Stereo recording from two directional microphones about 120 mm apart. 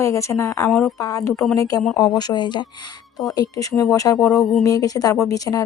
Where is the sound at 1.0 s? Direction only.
30° left (ahead or behind).